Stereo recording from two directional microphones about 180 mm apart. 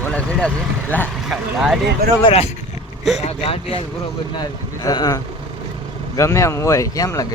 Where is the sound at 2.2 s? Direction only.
35° left (ahead or behind); by 7.2 s 20° left (ahead or behind).